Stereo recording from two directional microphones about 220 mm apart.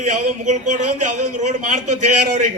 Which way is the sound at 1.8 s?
90° right.